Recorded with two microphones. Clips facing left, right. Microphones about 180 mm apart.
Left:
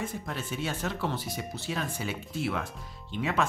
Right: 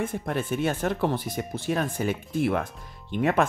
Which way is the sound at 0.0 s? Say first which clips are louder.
Right 7 dB; 55° right (ahead or behind).